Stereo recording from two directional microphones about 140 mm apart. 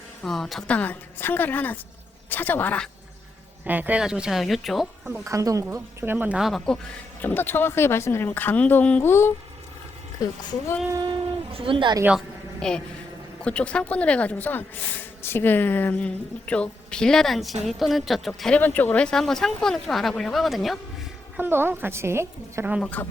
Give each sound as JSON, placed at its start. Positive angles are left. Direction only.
{"t": 0.2, "sound": "a woman's voice", "side_deg": 0}
{"t": 0.8, "sound": "a woman's voice", "side_deg": 10}
{"t": 3.6, "sound": "a woman's voice", "side_deg": -10}
{"t": 5.2, "sound": "speech", "side_deg": -25}
{"t": 7.2, "sound": "a woman's voice", "side_deg": 15}
{"t": 11.5, "sound": "a woman's voice", "side_deg": -40}
{"t": 12.5, "sound": "a woman's voice", "side_deg": 5}
{"t": 21.3, "sound": "speech", "side_deg": -15}
{"t": 22.8, "sound": "a woman's voice", "side_deg": 10}